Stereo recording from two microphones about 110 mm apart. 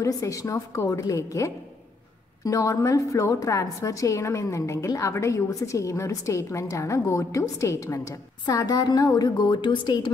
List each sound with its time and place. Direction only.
0.0 s a woman's voice: 30° left (ahead or behind)